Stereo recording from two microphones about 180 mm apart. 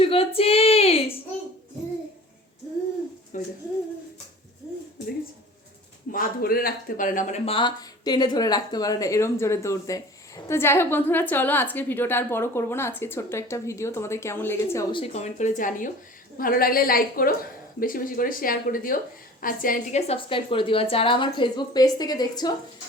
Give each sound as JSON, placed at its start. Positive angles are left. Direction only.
{"t": 0.0, "sound": "female singing", "side_deg": 30}
{"t": 3.3, "sound": "speech", "side_deg": 45}
{"t": 6.1, "sound": "speech", "side_deg": 55}
{"t": 14.9, "sound": "a woman's voice", "side_deg": 35}